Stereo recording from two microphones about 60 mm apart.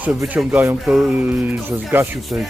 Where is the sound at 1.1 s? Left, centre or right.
Right.